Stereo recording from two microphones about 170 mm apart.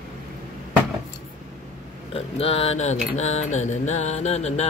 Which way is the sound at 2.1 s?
35° left (ahead or behind).